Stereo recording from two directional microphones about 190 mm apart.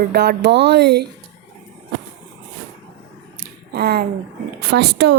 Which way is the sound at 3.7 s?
55° right (ahead or behind).